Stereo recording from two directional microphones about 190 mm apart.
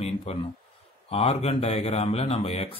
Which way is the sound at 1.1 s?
30° left (ahead or behind).